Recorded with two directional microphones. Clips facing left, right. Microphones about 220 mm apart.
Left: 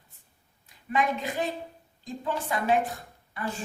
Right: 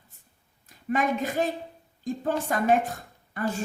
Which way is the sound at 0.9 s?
45° right (ahead or behind).